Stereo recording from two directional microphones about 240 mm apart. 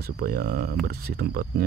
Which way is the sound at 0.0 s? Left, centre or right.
Right.